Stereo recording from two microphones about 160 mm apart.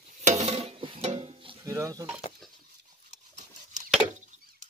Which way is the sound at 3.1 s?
50° right (ahead or behind).